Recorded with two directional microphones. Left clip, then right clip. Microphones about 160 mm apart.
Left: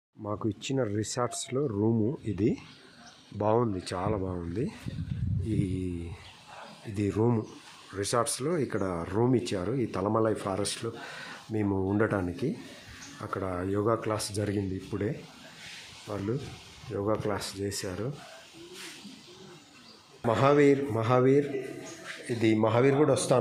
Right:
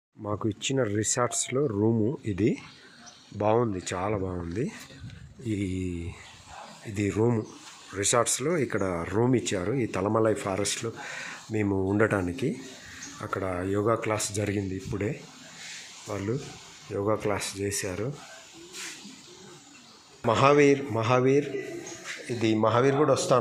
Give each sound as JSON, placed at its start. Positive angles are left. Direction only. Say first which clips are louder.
{"t": 0.2, "sound": "speech", "louder": "right 3 dB", "side_deg": -10}
{"t": 6.9, "sound": "speech", "louder": "right 2 dB", "side_deg": 0}
{"t": 20.2, "sound": "speech", "louder": "right 2 dB", "side_deg": 0}